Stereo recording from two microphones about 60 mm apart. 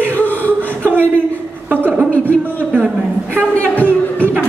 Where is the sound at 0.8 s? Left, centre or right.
Right.